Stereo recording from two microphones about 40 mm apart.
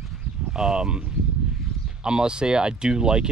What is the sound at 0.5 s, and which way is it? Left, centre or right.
Speech, centre.